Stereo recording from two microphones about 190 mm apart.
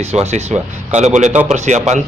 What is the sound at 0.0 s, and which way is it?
A man's voice, 35° right (ahead or behind).